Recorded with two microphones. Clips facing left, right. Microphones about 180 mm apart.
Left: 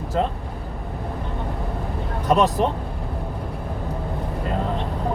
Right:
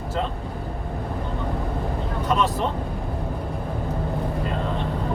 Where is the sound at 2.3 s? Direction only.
40° left (ahead or behind).